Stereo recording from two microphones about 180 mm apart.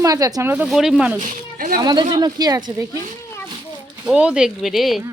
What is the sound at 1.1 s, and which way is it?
Speech, 50° right (ahead or behind).